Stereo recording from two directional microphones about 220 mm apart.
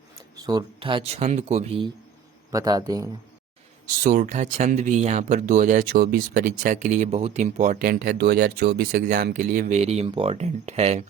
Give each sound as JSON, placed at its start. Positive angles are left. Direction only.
{"t": 0.3, "sound": "speech", "side_deg": -20}
{"t": 2.5, "sound": "a man's voice", "side_deg": -15}
{"t": 4.0, "sound": "speech", "side_deg": -35}